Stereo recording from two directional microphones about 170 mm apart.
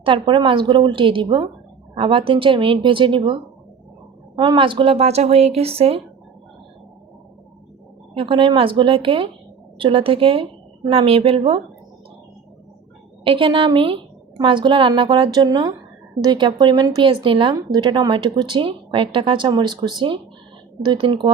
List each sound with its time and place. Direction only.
0.0 s a woman's voice: 30° right (ahead or behind)
8.1 s a woman's voice: 30° right (ahead or behind)
13.2 s speech: 30° right (ahead or behind)